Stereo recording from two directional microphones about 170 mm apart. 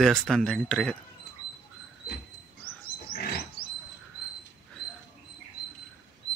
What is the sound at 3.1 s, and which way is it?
Pig, 65° left (ahead or behind).